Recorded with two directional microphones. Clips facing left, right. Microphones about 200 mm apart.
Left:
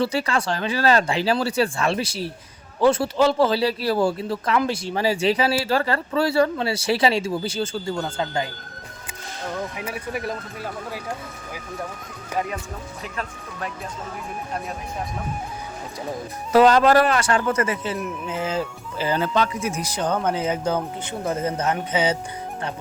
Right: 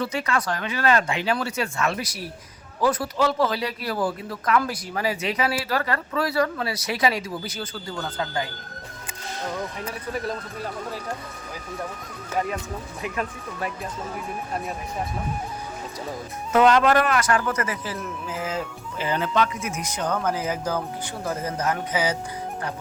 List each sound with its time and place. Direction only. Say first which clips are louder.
0.0 s speech: left 3 dB; 30° left (ahead or behind)
9.7 s speech: left 1 dB; 10° left (ahead or behind)
16.5 s speech: left 3 dB; 35° left (ahead or behind)